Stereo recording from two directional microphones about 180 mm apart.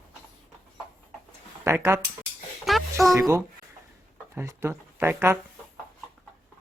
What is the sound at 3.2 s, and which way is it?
Speech, 15° right (ahead or behind).